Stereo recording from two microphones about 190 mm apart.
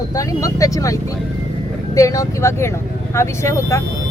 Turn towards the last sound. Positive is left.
turn(degrees=15)  # may be behind; listen again after turning